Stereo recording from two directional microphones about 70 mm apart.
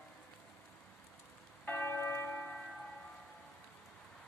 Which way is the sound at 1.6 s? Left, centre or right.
Left.